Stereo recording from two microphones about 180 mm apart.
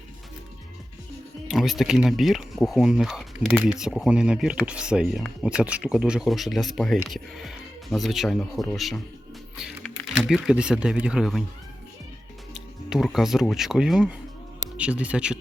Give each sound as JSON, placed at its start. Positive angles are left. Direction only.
{"t": 1.5, "sound": "speech", "side_deg": 0}
{"t": 12.5, "sound": "speech", "side_deg": 0}